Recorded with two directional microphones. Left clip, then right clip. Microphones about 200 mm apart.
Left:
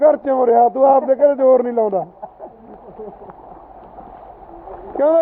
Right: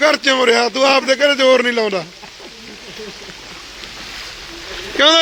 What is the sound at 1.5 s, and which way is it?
Speech, 20° right (ahead or behind).